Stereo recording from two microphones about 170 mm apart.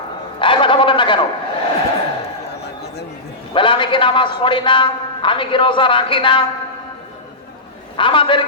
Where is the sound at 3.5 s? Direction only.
30° left (ahead or behind).